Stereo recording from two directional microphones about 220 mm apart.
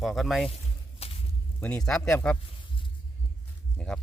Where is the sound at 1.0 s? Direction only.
25° left (ahead or behind).